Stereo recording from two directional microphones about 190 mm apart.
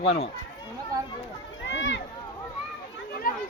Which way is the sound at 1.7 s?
75° left (ahead or behind).